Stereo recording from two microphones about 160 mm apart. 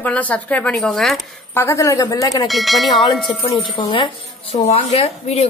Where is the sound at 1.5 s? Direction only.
15° left (ahead or behind).